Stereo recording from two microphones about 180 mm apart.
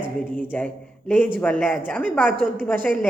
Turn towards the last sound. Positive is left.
turn(degrees=10)  # may be behind; listen again after turning